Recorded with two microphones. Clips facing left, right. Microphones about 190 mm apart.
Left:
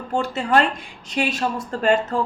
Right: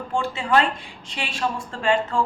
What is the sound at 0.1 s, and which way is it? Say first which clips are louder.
A woman's voice: left 2 dB; 40° left (ahead or behind).